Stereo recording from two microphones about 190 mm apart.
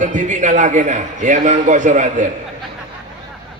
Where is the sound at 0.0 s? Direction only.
40° right (ahead or behind).